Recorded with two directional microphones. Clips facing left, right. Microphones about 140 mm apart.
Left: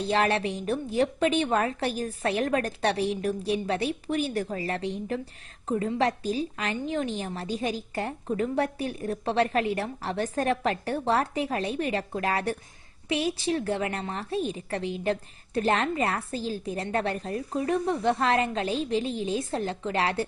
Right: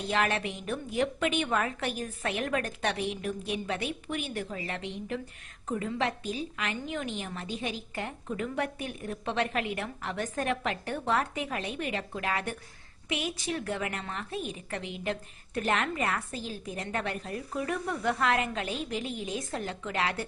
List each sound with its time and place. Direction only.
0.0 s a woman's voice: 35° left (ahead or behind)